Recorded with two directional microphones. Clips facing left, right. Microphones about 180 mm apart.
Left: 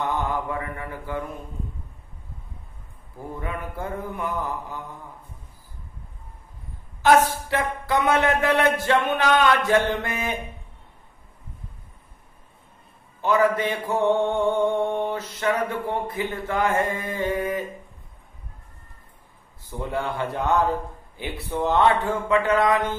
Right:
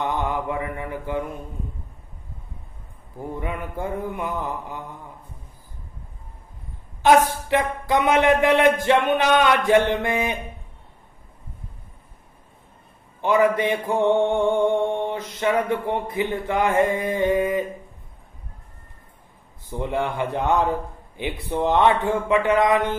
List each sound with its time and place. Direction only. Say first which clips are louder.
0.0 s mantra: right 1 dB; 20° right (ahead or behind)
3.3 s mantra: right 2 dB; 20° right (ahead or behind)
7.0 s speech: right 1 dB; 20° right (ahead or behind)
8.8 s mantra: right 3 dB; 20° right (ahead or behind)
13.2 s mantra: right 2 dB; 20° right (ahead or behind)
19.7 s a man's voice: right 3 dB; 15° right (ahead or behind)